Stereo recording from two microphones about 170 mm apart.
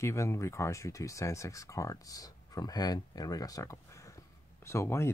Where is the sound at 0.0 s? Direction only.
15° left (ahead or behind).